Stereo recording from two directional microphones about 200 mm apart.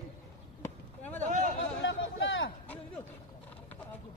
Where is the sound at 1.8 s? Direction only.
65° left (ahead or behind).